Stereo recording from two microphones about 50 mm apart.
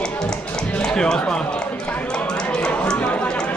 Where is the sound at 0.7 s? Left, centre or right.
Centre.